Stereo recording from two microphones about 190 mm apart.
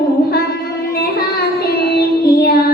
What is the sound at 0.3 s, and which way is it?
Child singing, 55° left (ahead or behind).